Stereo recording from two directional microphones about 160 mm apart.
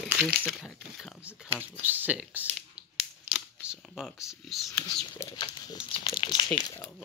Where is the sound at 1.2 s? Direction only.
10° right (ahead or behind).